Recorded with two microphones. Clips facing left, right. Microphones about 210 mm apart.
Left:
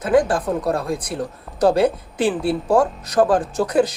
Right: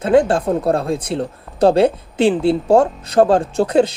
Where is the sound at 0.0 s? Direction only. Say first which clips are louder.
Right 3 dB; 25° right (ahead or behind).